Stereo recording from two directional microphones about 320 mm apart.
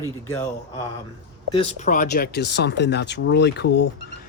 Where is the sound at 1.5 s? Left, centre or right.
Left.